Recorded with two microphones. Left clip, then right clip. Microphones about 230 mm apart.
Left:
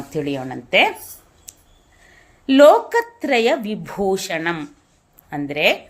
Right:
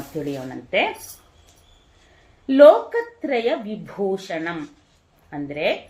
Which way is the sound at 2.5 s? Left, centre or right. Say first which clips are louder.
Left 1 dB; left.